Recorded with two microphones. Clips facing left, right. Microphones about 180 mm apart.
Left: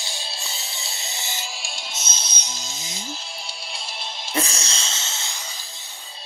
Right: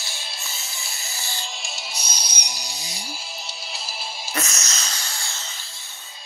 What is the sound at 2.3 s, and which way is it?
Music, 15° right (ahead or behind).